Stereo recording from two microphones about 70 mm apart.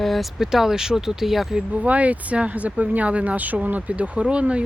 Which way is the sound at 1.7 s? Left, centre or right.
Right.